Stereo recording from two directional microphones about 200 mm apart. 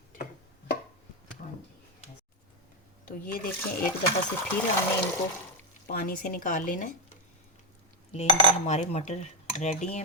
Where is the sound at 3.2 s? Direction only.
50° left (ahead or behind).